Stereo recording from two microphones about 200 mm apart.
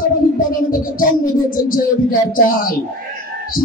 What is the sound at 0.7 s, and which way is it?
Speech, 45° left (ahead or behind).